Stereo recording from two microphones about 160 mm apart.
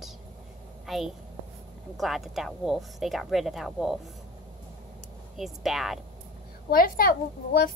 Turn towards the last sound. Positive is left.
turn(degrees=60)  # may be behind; listen again after turning